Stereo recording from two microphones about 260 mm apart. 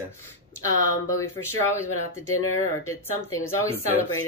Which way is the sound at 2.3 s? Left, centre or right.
Left.